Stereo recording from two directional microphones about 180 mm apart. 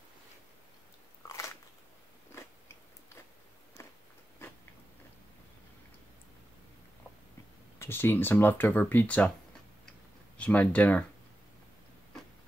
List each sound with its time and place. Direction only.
1.2 s biting: 15° left (ahead or behind)
7.8 s speech: 10° left (ahead or behind)
10.3 s speech: 5° left (ahead or behind)